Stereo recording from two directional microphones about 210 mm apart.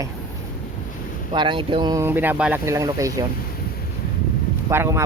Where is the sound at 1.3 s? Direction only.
20° right (ahead or behind).